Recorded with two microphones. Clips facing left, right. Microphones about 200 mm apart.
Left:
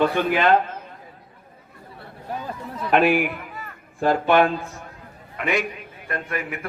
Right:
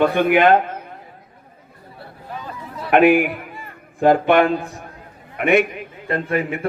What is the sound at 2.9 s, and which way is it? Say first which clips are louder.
Speech: right 5 dB; 50° right (ahead or behind).